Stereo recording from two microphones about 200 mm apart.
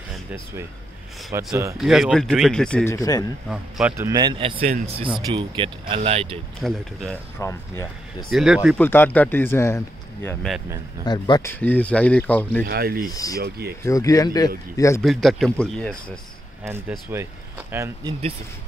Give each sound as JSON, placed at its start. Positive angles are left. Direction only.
{"t": 1.3, "sound": "a man's voice", "side_deg": -15}
{"t": 1.8, "sound": "speech", "side_deg": 0}
{"t": 3.4, "sound": "a man's voice", "side_deg": -5}
{"t": 6.6, "sound": "speech", "side_deg": 0}
{"t": 7.3, "sound": "speech", "side_deg": 15}
{"t": 8.3, "sound": "speech", "side_deg": 0}
{"t": 8.7, "sound": "speech", "side_deg": 10}
{"t": 11.6, "sound": "speech", "side_deg": 5}
{"t": 12.6, "sound": "speech", "side_deg": -50}
{"t": 13.0, "sound": "speech", "side_deg": 15}
{"t": 13.4, "sound": "speech", "side_deg": -50}
{"t": 13.8, "sound": "speech", "side_deg": 15}
{"t": 15.0, "sound": "speech", "side_deg": 0}
{"t": 17.1, "sound": "a man's voice", "side_deg": -10}